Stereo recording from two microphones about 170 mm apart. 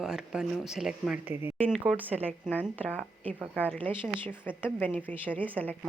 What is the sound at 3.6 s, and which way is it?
A woman's voice, 10° left (ahead or behind).